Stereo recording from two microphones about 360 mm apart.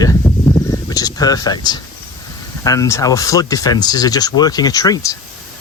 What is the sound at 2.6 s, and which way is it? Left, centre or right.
Speech, centre.